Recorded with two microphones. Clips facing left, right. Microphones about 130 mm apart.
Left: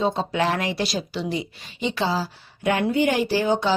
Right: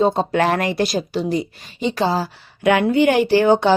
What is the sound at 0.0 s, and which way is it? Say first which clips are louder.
A woman's voice: right 6 dB; 55° right (ahead or behind).